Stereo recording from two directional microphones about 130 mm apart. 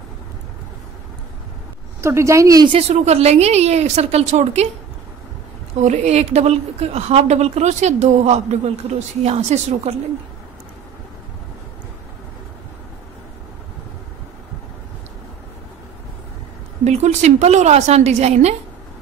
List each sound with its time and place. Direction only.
2.0 s a woman's voice: 20° right (ahead or behind)
2.7 s speech: 55° right (ahead or behind)
5.8 s speech: 60° right (ahead or behind)
16.8 s speech: 60° right (ahead or behind)